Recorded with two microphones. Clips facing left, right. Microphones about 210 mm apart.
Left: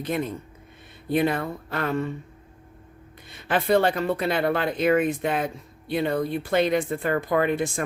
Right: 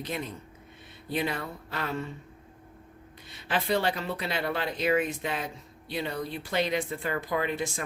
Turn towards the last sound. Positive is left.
turn(degrees=55)  # may be behind; listen again after turning